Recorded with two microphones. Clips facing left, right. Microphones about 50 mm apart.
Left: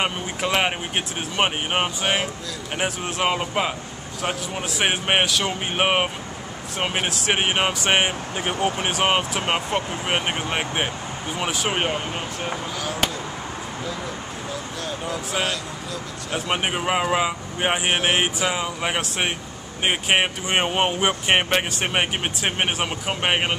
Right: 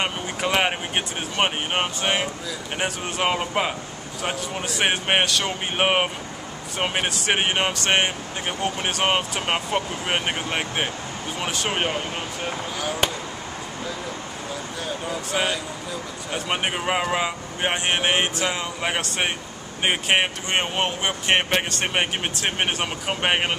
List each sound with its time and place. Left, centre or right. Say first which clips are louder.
0.0 s speech: left 1 dB; centre
15.0 s speech: right 1 dB; centre
16.3 s speech: left 1 dB; centre
20.4 s speech: left 3 dB; centre